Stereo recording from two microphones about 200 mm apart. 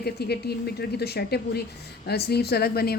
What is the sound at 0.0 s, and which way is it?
A woman's voice, 55° left (ahead or behind).